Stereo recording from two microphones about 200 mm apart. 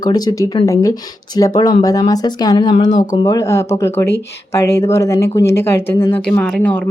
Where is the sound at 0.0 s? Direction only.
20° left (ahead or behind).